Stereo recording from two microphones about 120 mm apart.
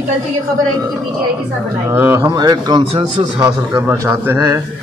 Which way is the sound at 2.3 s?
35° right (ahead or behind).